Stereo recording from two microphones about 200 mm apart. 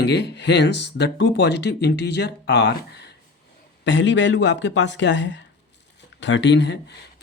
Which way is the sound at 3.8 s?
65° left (ahead or behind).